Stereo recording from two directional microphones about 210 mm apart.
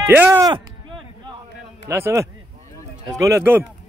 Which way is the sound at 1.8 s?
15° right (ahead or behind).